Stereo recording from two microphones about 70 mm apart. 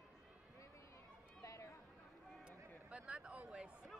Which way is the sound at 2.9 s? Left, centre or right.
Centre.